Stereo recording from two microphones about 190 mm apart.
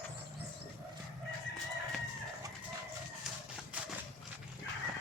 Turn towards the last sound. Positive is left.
turn(degrees=-10)  # may be behind; listen again after turning